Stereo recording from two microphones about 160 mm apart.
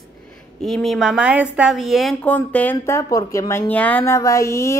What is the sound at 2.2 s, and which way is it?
Speech, 10° left (ahead or behind).